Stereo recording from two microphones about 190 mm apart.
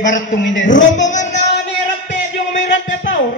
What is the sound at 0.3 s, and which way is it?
Speech, 75° left (ahead or behind).